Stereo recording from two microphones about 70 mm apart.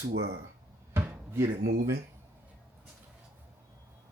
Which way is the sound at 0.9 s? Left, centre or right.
Right.